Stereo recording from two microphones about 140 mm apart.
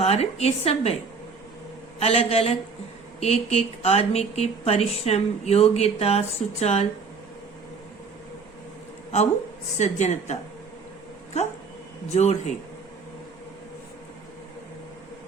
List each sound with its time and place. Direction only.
0.0 s speech: 50° left (ahead or behind)
2.0 s speech: 50° left (ahead or behind)
9.7 s a woman's voice: 55° left (ahead or behind)
12.0 s a woman's voice: 55° left (ahead or behind)